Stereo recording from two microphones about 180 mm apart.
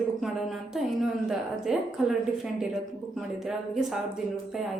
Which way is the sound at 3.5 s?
Centre (ahead or behind).